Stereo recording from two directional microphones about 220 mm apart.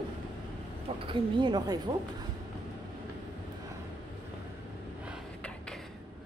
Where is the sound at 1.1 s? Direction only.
20° right (ahead or behind).